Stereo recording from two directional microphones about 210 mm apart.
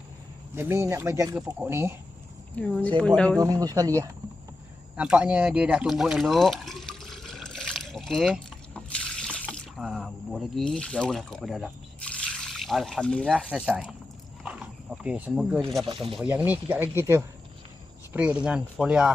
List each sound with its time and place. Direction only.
0.5 s speech: 10° right (ahead or behind)
2.6 s speech: 5° left (ahead or behind)
3.3 s speech: 15° right (ahead or behind)
4.9 s speech: 5° right (ahead or behind)
14.4 s wild animals: 5° right (ahead or behind)
15.9 s speech: 25° right (ahead or behind)
16.1 s speech: 10° right (ahead or behind)